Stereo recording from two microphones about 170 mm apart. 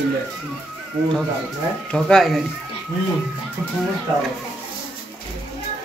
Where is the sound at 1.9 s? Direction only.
5° left (ahead or behind).